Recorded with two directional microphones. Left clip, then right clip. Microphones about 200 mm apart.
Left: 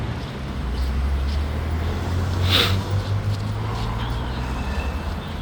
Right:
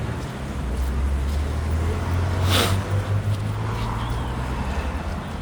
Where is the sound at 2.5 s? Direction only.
20° right (ahead or behind).